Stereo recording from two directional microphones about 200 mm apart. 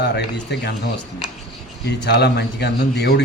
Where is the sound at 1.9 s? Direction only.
60° left (ahead or behind).